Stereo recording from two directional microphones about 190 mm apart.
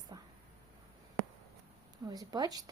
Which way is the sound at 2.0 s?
20° right (ahead or behind).